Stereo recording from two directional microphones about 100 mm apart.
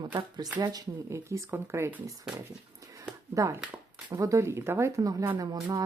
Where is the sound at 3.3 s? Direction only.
30° right (ahead or behind).